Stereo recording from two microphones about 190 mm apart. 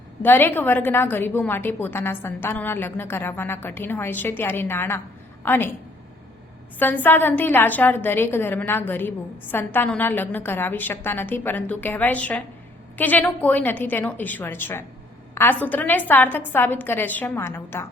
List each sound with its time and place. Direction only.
0.2 s a woman's voice: 10° left (ahead or behind)
6.7 s a woman's voice: 10° left (ahead or behind)